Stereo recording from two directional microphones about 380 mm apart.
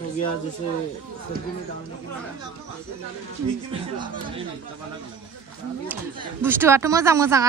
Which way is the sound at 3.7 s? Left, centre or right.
Centre.